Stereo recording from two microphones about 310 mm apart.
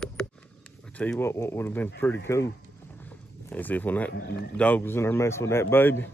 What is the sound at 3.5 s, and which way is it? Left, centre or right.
Speech, centre.